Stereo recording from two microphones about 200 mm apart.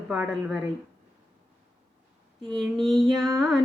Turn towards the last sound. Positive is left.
turn(degrees=0)  # may be behind; listen again after turning